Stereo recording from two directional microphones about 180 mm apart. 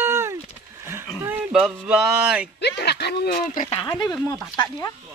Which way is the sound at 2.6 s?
65° left (ahead or behind).